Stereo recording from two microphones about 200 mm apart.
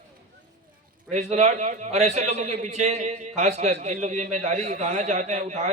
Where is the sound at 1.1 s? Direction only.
35° right (ahead or behind).